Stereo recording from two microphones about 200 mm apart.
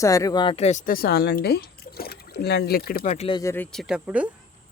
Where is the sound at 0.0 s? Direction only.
15° left (ahead or behind); by 3.1 s 50° left (ahead or behind).